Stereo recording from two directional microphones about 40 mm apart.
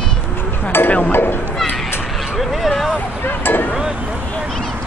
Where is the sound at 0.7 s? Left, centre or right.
Left.